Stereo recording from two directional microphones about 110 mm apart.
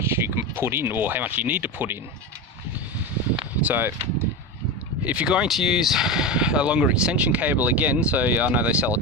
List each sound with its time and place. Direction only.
0.0 s speech: 25° right (ahead or behind)
3.6 s speech: 15° right (ahead or behind)